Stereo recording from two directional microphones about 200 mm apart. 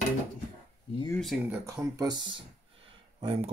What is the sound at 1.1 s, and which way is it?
Speech, centre (ahead or behind).